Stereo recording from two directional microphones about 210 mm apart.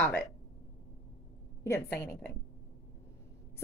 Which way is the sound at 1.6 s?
15° left (ahead or behind).